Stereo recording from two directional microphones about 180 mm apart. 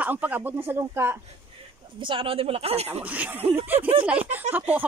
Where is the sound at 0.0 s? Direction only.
10° right (ahead or behind).